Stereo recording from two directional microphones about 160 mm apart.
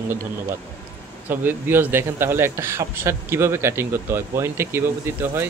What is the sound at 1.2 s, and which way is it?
A man's voice, 15° right (ahead or behind).